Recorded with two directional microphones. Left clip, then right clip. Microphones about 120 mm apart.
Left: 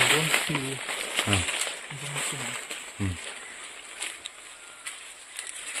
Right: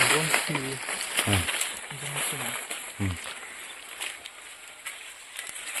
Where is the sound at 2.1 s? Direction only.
45° left (ahead or behind).